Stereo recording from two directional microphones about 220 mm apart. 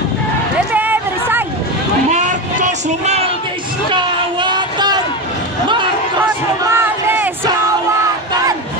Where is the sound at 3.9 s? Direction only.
20° right (ahead or behind).